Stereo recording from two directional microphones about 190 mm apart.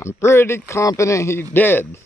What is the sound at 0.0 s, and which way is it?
A man's voice, 15° left (ahead or behind).